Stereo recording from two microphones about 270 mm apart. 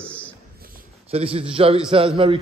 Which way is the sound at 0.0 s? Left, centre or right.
Centre.